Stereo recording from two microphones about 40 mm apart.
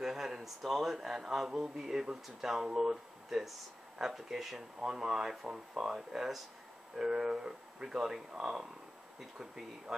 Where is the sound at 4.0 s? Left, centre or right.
Centre.